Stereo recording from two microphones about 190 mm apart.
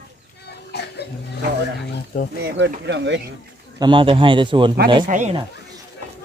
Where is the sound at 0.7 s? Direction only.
60° left (ahead or behind).